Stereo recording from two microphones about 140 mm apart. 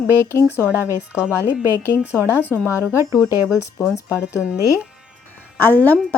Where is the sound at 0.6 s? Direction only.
15° right (ahead or behind).